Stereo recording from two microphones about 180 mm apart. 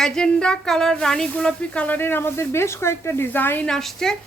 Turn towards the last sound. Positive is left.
turn(degrees=0)  # may be behind; listen again after turning